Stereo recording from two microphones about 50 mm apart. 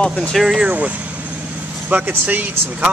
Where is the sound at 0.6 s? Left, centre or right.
Right.